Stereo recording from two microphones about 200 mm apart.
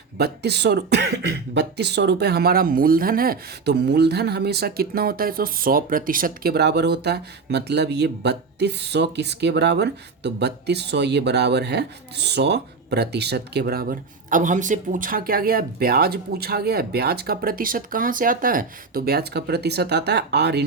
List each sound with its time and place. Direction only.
0.2 s speech: 55° right (ahead or behind)